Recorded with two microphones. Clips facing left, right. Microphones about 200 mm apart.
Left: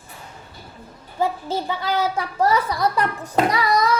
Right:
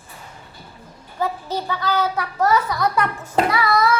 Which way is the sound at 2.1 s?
30° left (ahead or behind).